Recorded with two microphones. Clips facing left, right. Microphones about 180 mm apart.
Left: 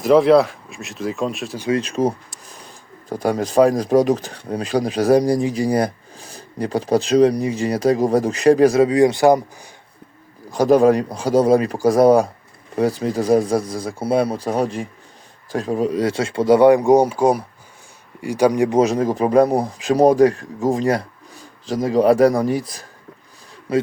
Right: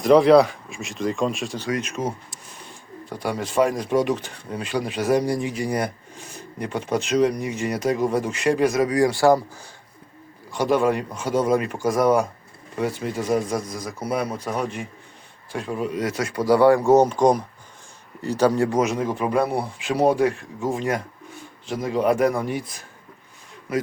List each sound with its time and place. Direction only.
0.0 s speech: centre (ahead or behind)
1.7 s speech: 30° left (ahead or behind)
10.5 s speech: 40° left (ahead or behind); by 18.8 s 15° left (ahead or behind)
18.8 s speech: 35° left (ahead or behind)